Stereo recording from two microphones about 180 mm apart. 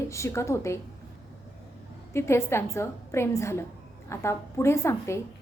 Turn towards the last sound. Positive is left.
turn(degrees=15)  # may be behind; listen again after turning